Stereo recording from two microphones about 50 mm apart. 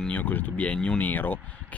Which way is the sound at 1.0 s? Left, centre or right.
Left.